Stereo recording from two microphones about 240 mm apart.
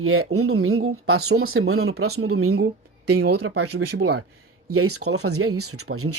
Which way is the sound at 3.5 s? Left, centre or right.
Right.